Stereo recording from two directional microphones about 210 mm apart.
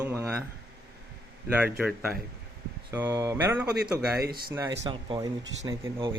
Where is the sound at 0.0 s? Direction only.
10° right (ahead or behind).